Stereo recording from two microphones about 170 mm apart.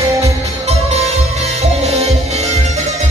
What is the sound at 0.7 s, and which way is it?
Music, 40° right (ahead or behind).